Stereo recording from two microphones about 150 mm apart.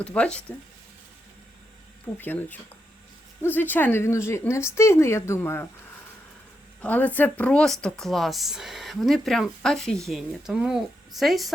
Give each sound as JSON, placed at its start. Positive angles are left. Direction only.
{"t": 0.0, "sound": "a woman's voice", "side_deg": 10}
{"t": 2.1, "sound": "a woman's voice", "side_deg": 15}
{"t": 6.8, "sound": "a woman's voice", "side_deg": 10}